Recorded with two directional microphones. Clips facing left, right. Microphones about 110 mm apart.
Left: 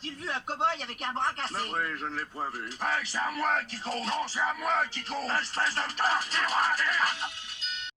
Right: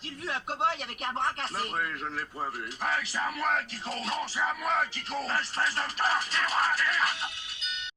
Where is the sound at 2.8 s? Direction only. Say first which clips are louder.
Even; 35° left (ahead or behind).